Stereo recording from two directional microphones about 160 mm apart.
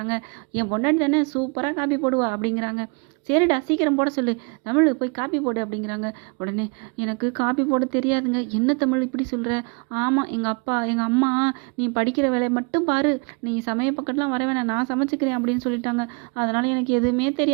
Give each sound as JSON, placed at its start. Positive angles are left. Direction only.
{"t": 0.1, "sound": "speech", "side_deg": -30}
{"t": 7.0, "sound": "speech", "side_deg": -25}